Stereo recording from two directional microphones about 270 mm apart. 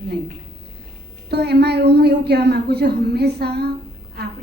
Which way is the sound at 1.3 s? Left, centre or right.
Right.